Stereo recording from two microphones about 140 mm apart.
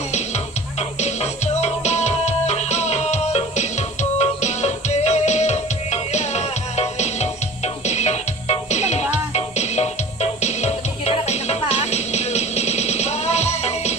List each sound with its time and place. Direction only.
0.1 s music: 55° left (ahead or behind)